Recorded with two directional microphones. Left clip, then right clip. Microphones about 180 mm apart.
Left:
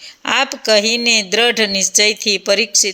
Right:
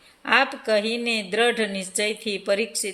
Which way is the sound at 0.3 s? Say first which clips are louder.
Left 5 dB; 25° left (ahead or behind).